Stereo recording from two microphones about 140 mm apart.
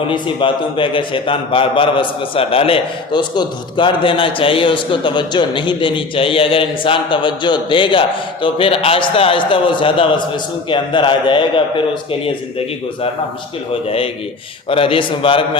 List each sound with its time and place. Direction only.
0.1 s a man's voice: 35° left (ahead or behind)